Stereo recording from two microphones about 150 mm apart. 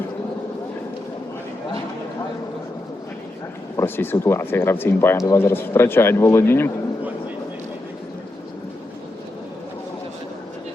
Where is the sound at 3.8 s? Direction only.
15° left (ahead or behind).